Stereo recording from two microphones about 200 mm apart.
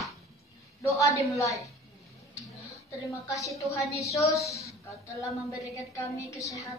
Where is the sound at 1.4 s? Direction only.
15° left (ahead or behind).